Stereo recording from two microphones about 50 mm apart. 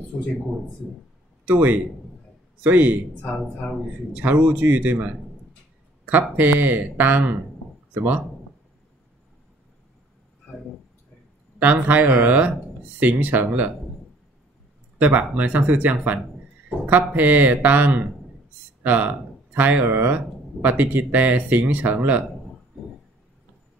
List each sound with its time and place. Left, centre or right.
1.5 s speech: right
4.1 s speech: right
11.6 s speech: right
15.0 s speech: right